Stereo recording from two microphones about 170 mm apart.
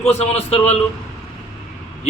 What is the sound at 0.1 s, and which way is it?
Speech, 35° left (ahead or behind).